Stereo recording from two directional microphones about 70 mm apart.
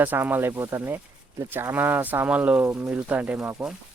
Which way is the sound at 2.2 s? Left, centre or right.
Centre.